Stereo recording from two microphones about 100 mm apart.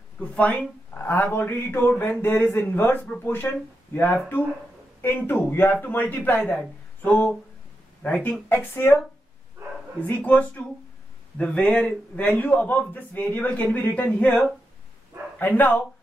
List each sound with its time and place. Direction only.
0.2 s a man's voice: 15° left (ahead or behind)
10.0 s a man's voice: 15° left (ahead or behind)
15.3 s a man's voice: 15° left (ahead or behind)